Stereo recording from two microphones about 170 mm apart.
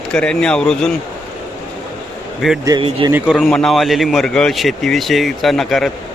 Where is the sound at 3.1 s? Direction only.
5° right (ahead or behind).